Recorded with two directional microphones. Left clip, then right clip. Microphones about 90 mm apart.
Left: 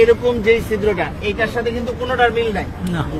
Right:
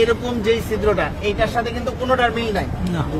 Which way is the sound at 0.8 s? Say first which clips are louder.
Even; 45° right (ahead or behind).